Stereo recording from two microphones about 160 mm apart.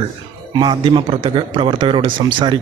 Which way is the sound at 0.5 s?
25° right (ahead or behind).